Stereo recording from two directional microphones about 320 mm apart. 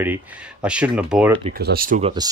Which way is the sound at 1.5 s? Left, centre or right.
Right.